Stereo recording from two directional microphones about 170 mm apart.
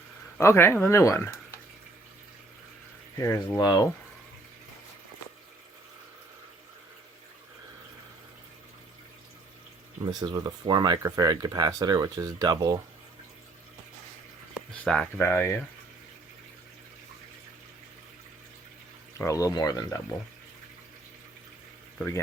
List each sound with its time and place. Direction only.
0.3 s speech: 15° left (ahead or behind)
3.2 s speech: 20° left (ahead or behind)
10.0 s speech: 20° right (ahead or behind)
14.5 s a sound: centre (ahead or behind)
15.2 s speech: 15° left (ahead or behind)
19.1 s speech: 20° left (ahead or behind)